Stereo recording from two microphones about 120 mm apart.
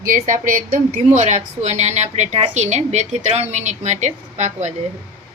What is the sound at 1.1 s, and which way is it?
Speech, 80° right.